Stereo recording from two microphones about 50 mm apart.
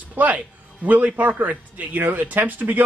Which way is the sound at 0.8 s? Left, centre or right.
Right.